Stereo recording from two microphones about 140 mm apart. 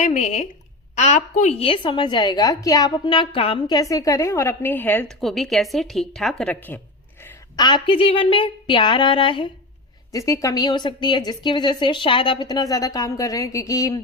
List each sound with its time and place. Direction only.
0.0 s a woman's voice: 60° left (ahead or behind); by 3.8 s 40° left (ahead or behind)
3.8 s a woman's voice: 25° left (ahead or behind)
5.2 s a woman's voice: centre (ahead or behind)
6.4 s a woman's voice: 10° left (ahead or behind)
7.5 s a woman's voice: 30° left (ahead or behind)
10.1 s a woman's voice: 20° left (ahead or behind)